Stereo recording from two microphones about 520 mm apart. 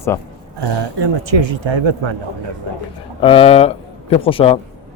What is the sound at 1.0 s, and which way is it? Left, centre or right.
Speech, right.